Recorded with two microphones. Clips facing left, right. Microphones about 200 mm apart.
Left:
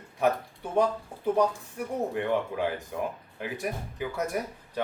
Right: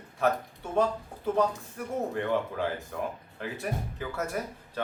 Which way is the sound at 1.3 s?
15° left (ahead or behind).